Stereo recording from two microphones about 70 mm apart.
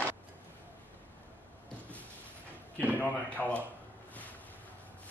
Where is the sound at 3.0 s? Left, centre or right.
Left.